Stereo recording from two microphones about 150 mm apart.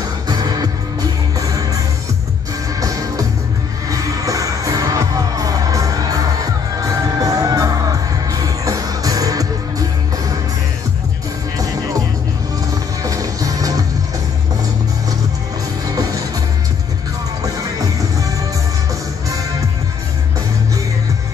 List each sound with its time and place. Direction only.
0.3 s music: 25° right (ahead or behind)
2.8 s music: 25° right (ahead or behind)
11.5 s music: 25° right (ahead or behind)
13.0 s music: 25° right (ahead or behind)
15.9 s music: 25° right (ahead or behind)